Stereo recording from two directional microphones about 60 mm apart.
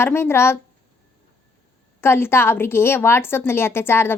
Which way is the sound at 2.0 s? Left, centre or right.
Left.